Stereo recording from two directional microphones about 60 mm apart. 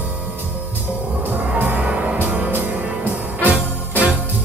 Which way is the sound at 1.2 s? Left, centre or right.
Right.